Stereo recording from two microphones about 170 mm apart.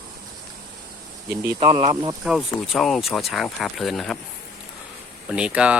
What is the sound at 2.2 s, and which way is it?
Speech, centre (ahead or behind).